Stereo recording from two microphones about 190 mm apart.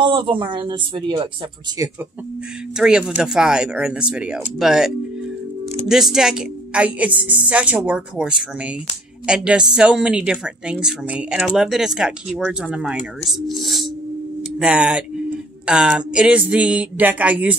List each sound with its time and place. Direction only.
0.0 s speech: 25° right (ahead or behind)
2.8 s a woman's voice: 5° right (ahead or behind)